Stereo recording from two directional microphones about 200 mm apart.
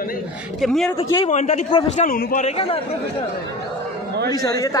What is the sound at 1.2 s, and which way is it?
Speech, 35° left (ahead or behind).